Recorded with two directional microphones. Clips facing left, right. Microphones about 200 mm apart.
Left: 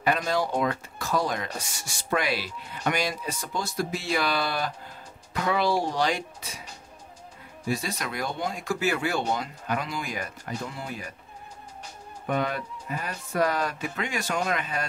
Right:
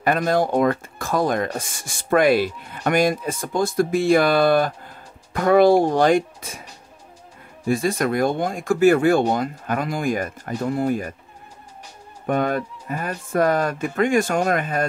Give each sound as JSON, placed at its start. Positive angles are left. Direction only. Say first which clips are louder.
{"t": 0.0, "sound": "speech", "louder": "right 6 dB", "side_deg": -50}
{"t": 7.6, "sound": "speech", "louder": "right 10 dB", "side_deg": -50}
{"t": 12.3, "sound": "speech", "louder": "right 6 dB", "side_deg": -50}